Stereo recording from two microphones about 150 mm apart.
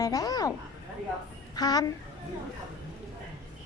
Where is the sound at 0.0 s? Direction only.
25° left (ahead or behind).